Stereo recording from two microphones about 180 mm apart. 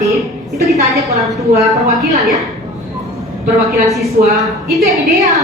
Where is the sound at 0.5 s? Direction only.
Centre (ahead or behind).